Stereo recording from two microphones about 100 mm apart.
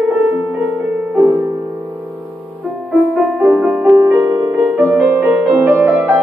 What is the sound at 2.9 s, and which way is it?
Music, 15° right (ahead or behind).